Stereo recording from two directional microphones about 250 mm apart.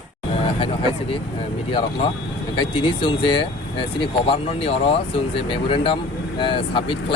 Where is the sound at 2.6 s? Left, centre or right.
Centre.